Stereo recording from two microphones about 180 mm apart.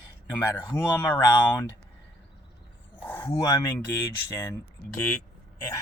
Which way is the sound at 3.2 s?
20° left (ahead or behind).